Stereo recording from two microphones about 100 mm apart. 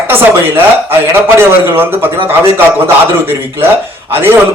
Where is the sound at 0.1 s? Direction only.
20° right (ahead or behind).